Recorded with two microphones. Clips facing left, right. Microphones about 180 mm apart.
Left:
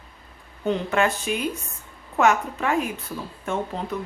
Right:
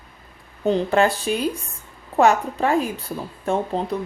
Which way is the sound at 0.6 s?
35° right (ahead or behind).